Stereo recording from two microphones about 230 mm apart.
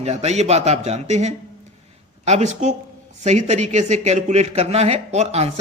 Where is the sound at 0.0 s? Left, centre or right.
Right.